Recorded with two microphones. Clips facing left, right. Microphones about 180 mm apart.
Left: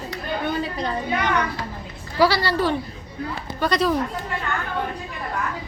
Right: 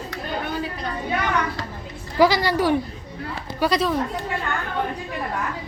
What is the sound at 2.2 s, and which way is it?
Speech, 15° right (ahead or behind).